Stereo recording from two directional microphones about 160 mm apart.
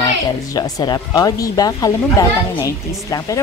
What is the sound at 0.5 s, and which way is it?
Speech, 25° left (ahead or behind).